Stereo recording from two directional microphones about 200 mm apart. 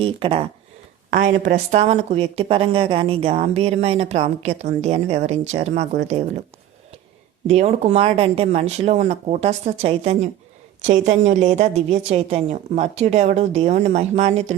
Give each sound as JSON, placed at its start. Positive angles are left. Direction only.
{"t": 0.0, "sound": "speech", "side_deg": -25}
{"t": 1.1, "sound": "a woman's voice", "side_deg": -40}
{"t": 7.4, "sound": "a woman's voice", "side_deg": -30}